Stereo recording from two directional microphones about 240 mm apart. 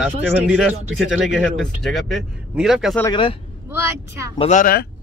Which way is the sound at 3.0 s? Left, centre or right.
Centre.